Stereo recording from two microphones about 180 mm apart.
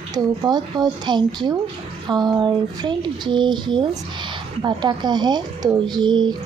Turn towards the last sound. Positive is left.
turn(degrees=-25)  # may be behind; listen again after turning